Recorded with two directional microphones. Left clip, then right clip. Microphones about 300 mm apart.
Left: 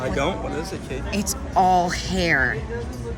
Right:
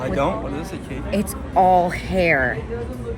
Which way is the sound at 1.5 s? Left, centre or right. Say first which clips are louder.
Right 3 dB; centre.